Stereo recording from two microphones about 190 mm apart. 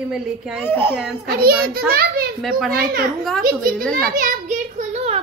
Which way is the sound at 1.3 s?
55° right (ahead or behind).